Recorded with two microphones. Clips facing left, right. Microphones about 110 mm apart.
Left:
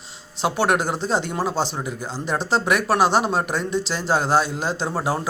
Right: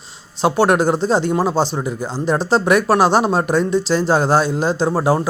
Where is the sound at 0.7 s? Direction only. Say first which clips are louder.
Right 6 dB; 35° right (ahead or behind).